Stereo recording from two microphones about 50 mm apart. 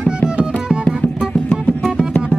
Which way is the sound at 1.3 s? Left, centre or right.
Left.